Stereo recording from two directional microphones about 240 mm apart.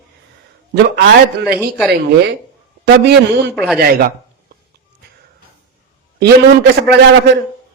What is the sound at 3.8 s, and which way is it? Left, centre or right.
Speech, right.